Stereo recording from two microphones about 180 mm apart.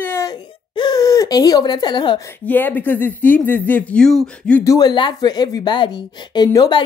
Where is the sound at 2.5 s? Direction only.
10° left (ahead or behind).